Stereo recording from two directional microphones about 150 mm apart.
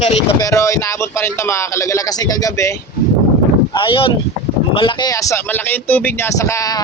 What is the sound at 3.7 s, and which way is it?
Speech, 35° left (ahead or behind).